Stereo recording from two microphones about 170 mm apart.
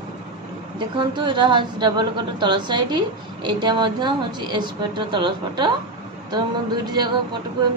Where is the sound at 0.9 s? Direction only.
30° right (ahead or behind).